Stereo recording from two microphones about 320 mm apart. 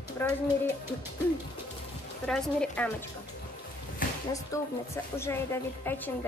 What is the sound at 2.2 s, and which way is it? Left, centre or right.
Speech, centre.